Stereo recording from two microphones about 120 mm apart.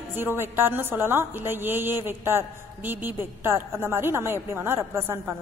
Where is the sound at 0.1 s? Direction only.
20° right (ahead or behind).